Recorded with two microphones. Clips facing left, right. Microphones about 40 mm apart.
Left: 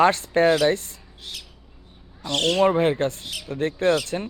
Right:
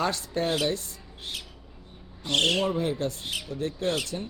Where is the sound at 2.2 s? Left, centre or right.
Right.